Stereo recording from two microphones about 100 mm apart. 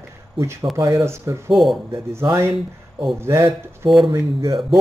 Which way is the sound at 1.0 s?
25° right (ahead or behind).